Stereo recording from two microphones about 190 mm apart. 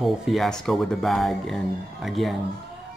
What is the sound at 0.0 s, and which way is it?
A man's voice, centre (ahead or behind).